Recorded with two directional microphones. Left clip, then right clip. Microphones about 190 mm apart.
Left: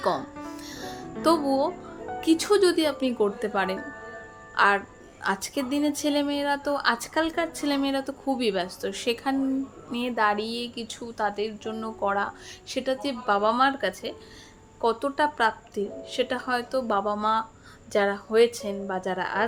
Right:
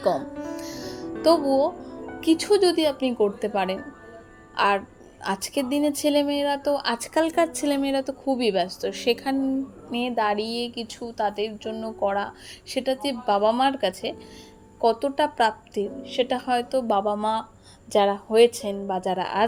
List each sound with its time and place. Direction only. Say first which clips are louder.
0.0 s music: right 3 dB; 5° right (ahead or behind)
2.2 s a woman's voice: right 1 dB; 5° left (ahead or behind); by 7.8 s 15° right (ahead or behind)
7.8 s a woman's voice: right 2 dB; 5° right (ahead or behind)